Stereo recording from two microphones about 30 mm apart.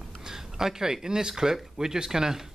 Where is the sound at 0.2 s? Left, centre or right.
Centre.